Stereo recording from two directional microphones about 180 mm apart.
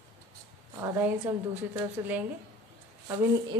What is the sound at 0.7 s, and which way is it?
Speech, 15° right (ahead or behind).